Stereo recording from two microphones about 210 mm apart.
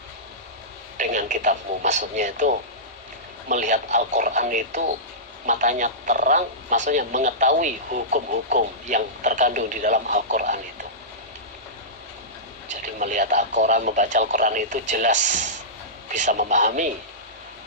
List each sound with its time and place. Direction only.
0.9 s speech: 40° right (ahead or behind)
12.6 s speech: 35° right (ahead or behind)